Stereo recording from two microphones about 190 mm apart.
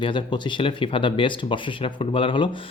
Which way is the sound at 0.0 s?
25° left (ahead or behind).